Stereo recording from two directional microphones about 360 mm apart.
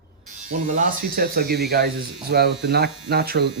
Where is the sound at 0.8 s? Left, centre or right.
Right.